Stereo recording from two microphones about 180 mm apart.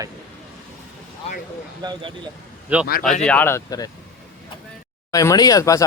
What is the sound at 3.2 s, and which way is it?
Speech, 10° left (ahead or behind).